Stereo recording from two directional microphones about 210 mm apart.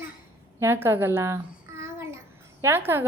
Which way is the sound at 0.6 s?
10° right (ahead or behind).